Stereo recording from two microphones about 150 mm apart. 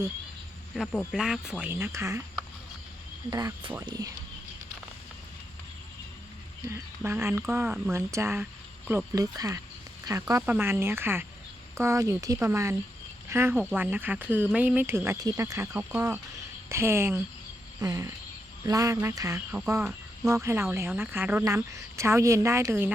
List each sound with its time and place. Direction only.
0.7 s speech: centre (ahead or behind); by 2.2 s 20° right (ahead or behind)
3.2 s speech: 25° right (ahead or behind)
6.7 s speech: 15° right (ahead or behind)